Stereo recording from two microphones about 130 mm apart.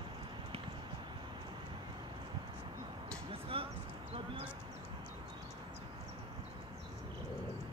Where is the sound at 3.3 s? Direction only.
45° right (ahead or behind).